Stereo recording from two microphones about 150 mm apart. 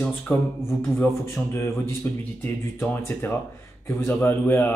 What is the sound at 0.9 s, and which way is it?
A man's voice, 15° left (ahead or behind).